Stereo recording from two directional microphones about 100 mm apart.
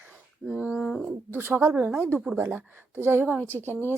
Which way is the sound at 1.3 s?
20° right (ahead or behind).